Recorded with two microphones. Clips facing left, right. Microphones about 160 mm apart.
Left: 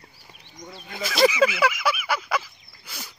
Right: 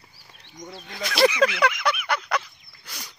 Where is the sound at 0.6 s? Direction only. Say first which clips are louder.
Even; centre (ahead or behind).